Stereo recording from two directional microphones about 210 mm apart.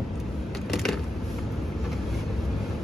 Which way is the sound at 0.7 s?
Centre (ahead or behind).